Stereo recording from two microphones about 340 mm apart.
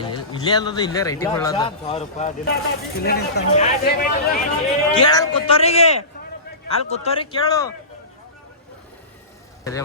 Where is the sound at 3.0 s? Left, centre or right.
Left; by 7.6 s centre.